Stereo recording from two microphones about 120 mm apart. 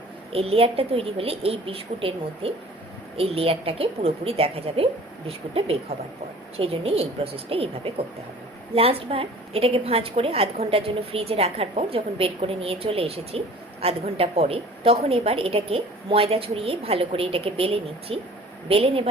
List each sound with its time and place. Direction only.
0.3 s a woman's voice: 55° right (ahead or behind)
6.6 s a woman's voice: 55° right (ahead or behind)